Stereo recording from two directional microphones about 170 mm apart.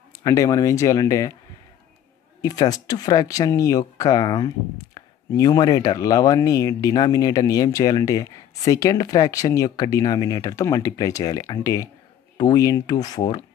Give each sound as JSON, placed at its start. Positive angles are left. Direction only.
{"t": 0.1, "sound": "speech", "side_deg": 20}
{"t": 2.4, "sound": "speech", "side_deg": 20}